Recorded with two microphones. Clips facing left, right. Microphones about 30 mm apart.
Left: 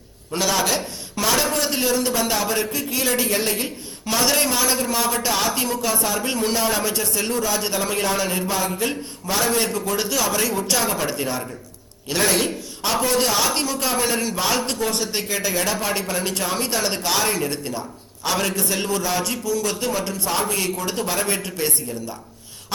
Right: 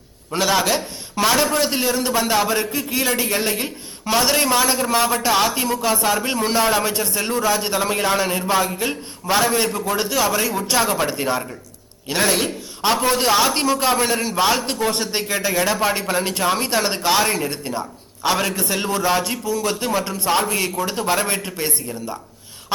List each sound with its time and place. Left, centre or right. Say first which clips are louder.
0.3 s a man's voice: right 3 dB; right
5.9 s a man's voice: right 4 dB; right
6.2 s a man's voice: right 3 dB; centre
8.6 s a man's voice: even; centre
9.2 s a man's voice: right 3 dB; right
14.7 s a man's voice: right 2 dB; right